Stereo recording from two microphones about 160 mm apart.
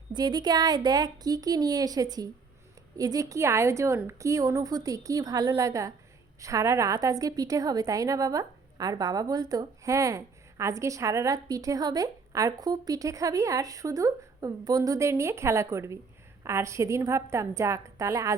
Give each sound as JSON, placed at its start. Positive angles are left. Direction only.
{"t": 0.1, "sound": "a woman's voice", "side_deg": -25}